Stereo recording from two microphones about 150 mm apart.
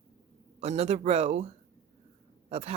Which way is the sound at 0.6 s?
45° right (ahead or behind).